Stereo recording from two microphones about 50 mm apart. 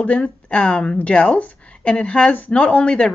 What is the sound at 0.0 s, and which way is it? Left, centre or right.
Speech, left.